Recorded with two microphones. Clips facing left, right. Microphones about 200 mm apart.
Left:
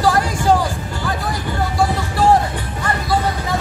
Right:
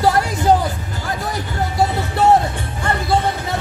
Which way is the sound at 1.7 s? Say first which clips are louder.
Right 2 dB; 25° right (ahead or behind).